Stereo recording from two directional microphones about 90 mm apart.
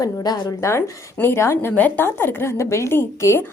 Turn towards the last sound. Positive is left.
turn(degrees=25)  # may be behind; listen again after turning